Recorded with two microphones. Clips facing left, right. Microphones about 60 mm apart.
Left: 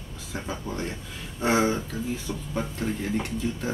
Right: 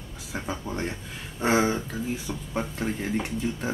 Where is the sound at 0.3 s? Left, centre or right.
Right.